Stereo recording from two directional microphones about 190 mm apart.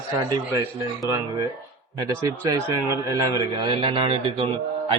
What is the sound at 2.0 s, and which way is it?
A man's voice, 15° right (ahead or behind).